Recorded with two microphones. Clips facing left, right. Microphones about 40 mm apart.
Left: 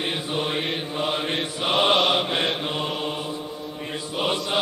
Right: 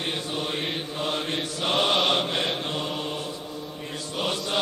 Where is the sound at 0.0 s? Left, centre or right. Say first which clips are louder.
Left 3 dB; centre.